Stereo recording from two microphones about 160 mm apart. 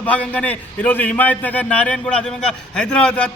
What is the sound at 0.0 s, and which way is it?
A man's voice, 10° left (ahead or behind).